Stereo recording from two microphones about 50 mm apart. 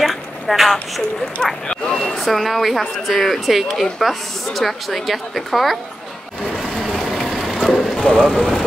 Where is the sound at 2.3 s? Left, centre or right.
Centre.